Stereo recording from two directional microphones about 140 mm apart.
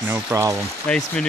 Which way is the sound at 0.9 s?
5° left (ahead or behind).